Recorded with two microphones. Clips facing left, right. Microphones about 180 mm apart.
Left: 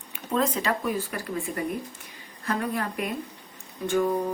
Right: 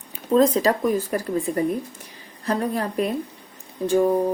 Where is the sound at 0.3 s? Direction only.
35° right (ahead or behind).